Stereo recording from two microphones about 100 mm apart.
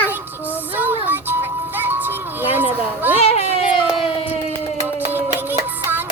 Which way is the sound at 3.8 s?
55° left (ahead or behind).